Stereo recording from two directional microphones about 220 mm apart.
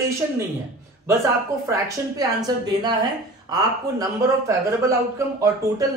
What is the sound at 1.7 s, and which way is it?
Speech, 15° right (ahead or behind).